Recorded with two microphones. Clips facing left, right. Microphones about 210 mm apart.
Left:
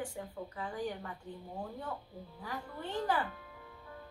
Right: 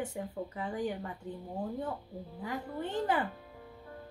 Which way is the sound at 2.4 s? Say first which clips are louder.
Right 5 dB; 20° right (ahead or behind).